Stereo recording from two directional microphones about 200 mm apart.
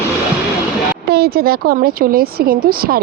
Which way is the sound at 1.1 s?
50° right (ahead or behind).